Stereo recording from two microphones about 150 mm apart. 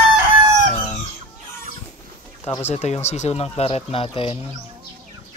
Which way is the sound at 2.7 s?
45° left (ahead or behind).